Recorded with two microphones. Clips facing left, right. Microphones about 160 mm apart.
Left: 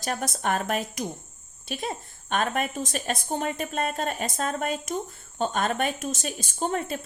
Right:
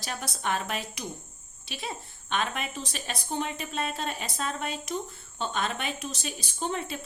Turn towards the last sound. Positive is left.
turn(degrees=45)  # may be behind; listen again after turning